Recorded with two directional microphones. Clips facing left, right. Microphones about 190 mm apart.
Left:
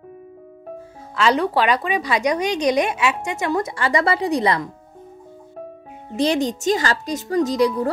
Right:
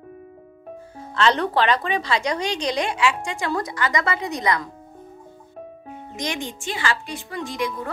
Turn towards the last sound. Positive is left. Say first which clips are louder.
# left 9 dB
turn(degrees=35)  # may be behind; listen again after turning